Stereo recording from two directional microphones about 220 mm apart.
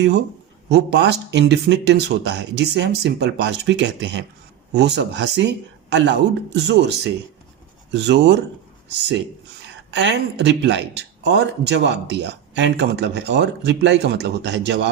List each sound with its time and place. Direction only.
0.7 s a man's voice: 50° right (ahead or behind)
9.9 s a man's voice: 50° right (ahead or behind)